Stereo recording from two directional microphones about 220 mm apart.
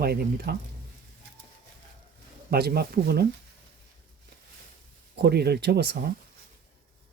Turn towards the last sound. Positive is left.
turn(degrees=-45)  # may be behind; listen again after turning